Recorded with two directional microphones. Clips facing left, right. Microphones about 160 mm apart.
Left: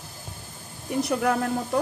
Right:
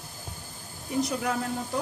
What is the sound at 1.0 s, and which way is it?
Speech, 60° left (ahead or behind).